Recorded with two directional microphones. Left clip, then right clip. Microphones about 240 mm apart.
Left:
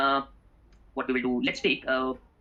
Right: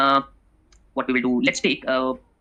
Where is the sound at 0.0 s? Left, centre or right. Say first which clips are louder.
Right 7 dB; right.